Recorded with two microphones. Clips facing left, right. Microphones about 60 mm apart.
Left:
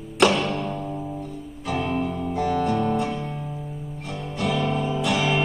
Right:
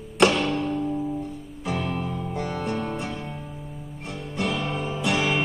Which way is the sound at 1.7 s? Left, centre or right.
Left.